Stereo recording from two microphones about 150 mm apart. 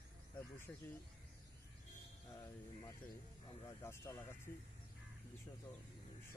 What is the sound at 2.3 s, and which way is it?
Speech, 25° left (ahead or behind).